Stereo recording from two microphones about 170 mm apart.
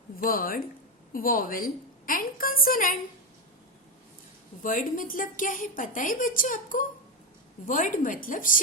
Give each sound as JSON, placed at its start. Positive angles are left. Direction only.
{"t": 0.2, "sound": "a woman's voice", "side_deg": 55}
{"t": 4.6, "sound": "a woman's voice", "side_deg": 50}